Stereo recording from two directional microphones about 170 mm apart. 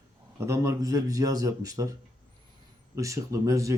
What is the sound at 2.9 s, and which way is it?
Speech, 20° right (ahead or behind).